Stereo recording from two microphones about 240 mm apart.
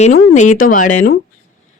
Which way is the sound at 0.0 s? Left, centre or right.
Left.